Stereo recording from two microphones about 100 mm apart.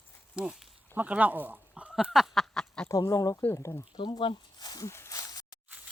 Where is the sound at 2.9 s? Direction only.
35° left (ahead or behind).